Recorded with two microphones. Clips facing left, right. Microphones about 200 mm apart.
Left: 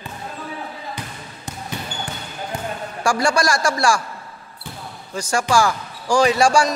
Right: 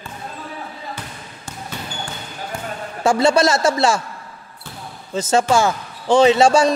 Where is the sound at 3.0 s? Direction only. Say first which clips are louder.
Right 5 dB; 20° right (ahead or behind).